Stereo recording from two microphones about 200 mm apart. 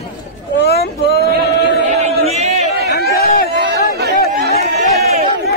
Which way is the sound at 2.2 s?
35° right (ahead or behind).